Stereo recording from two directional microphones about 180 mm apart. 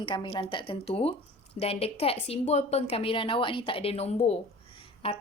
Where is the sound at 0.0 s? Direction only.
30° left (ahead or behind).